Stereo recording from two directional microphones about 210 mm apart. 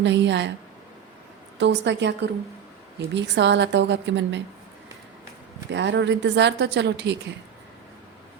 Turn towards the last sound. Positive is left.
turn(degrees=-55)  # may be behind; listen again after turning